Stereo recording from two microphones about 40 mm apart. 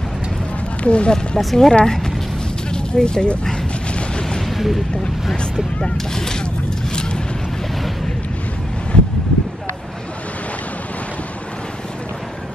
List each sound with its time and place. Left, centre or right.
0.8 s speech: left
1.4 s speech: centre
1.7 s speech: centre
4.1 s artillery fire: left
4.5 s a sound: centre
5.9 s speech: centre
6.9 s vehicle: centre
8.9 s wind: left